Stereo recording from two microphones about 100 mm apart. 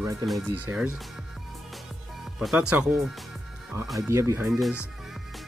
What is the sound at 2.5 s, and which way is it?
Speech, 10° right (ahead or behind).